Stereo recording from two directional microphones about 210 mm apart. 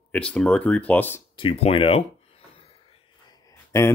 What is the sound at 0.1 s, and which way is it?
Speech, 5° left (ahead or behind).